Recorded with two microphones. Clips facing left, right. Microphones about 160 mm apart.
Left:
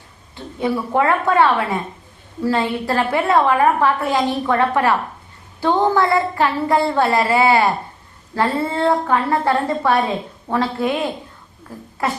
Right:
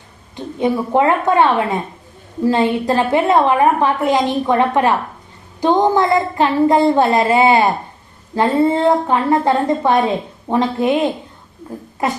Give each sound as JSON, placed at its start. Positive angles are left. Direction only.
{"t": 0.3, "sound": "a woman's voice", "side_deg": -20}